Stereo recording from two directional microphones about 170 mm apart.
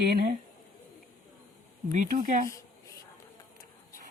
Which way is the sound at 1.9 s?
50° right (ahead or behind).